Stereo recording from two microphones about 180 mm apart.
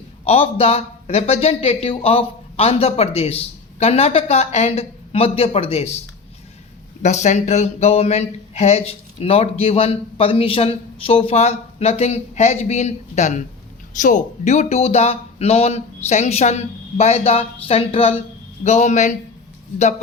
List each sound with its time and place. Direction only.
0.3 s speech: 35° left (ahead or behind)
7.0 s speech: 40° left (ahead or behind)